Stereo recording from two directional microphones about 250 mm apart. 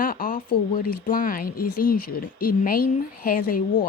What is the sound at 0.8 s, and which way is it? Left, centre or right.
Speech, left.